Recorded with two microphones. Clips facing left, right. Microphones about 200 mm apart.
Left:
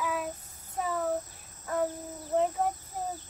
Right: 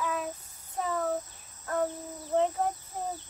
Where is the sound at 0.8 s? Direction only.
5° left (ahead or behind).